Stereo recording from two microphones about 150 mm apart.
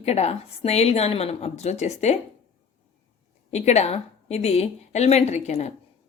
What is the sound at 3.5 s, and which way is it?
A woman's voice, 50° left (ahead or behind).